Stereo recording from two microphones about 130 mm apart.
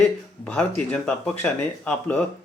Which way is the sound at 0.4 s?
5° left (ahead or behind).